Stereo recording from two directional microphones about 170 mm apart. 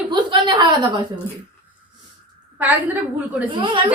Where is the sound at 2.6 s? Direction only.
10° right (ahead or behind).